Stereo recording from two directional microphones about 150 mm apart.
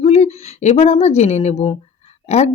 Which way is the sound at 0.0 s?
45° left (ahead or behind).